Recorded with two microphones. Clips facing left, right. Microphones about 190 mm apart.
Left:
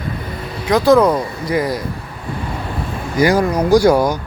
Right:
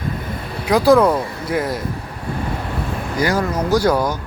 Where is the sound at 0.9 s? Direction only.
5° right (ahead or behind).